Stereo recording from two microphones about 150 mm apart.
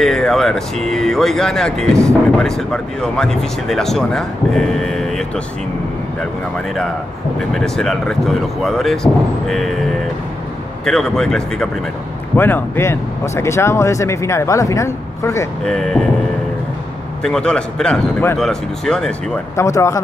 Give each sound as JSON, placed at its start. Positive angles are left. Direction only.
{"t": 0.0, "sound": "speech", "side_deg": 0}
{"t": 7.3, "sound": "speech", "side_deg": 0}
{"t": 10.9, "sound": "speech", "side_deg": 5}
{"t": 12.4, "sound": "speech", "side_deg": 15}
{"t": 15.6, "sound": "speech", "side_deg": 5}
{"t": 17.2, "sound": "speech", "side_deg": 5}
{"t": 19.5, "sound": "speech", "side_deg": 20}